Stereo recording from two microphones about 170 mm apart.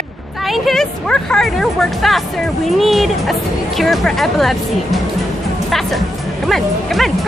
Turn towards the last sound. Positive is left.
turn(degrees=0)  # may be behind; listen again after turning